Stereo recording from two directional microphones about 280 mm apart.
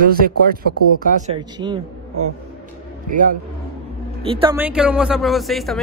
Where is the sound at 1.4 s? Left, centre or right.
Centre.